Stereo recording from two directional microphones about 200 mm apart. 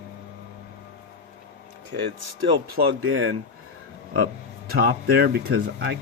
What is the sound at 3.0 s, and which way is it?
Speech, 75° right (ahead or behind).